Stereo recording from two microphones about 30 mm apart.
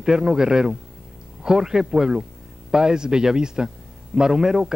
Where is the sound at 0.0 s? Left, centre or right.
Centre.